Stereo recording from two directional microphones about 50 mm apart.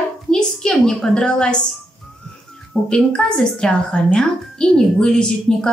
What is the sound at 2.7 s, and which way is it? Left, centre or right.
A woman's voice, centre.